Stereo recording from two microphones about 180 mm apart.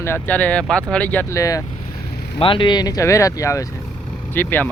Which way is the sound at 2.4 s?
30° left (ahead or behind).